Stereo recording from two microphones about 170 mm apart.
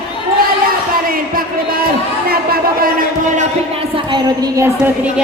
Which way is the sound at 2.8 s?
55° right (ahead or behind).